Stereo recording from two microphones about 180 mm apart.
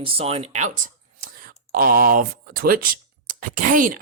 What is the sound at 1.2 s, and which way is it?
Speech, 50° right (ahead or behind).